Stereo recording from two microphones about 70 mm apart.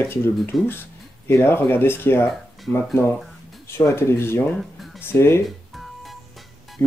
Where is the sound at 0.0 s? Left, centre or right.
Left.